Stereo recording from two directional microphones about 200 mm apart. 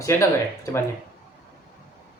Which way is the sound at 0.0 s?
15° left (ahead or behind).